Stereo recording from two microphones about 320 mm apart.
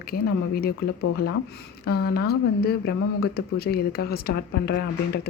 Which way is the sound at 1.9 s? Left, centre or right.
Left.